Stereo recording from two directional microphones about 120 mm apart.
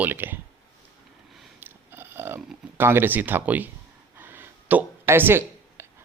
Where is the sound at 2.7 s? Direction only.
20° right (ahead or behind).